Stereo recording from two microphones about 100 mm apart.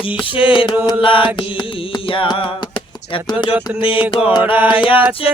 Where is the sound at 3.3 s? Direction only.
50° left (ahead or behind).